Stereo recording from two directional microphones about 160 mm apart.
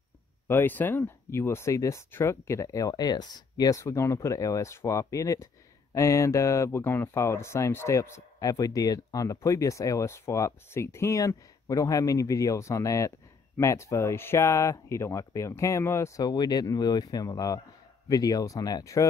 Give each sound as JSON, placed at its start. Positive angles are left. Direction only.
{"t": 0.5, "sound": "speech", "side_deg": 15}